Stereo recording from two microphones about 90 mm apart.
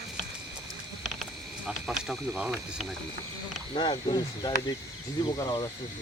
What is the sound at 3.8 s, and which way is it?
Speech, 60° left (ahead or behind).